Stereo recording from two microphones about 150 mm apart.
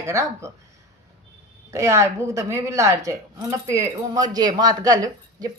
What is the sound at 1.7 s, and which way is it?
A woman's voice, 20° right (ahead or behind).